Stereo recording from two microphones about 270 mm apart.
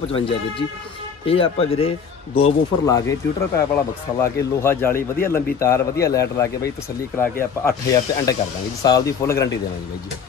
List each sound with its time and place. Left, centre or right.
0.1 s speech: centre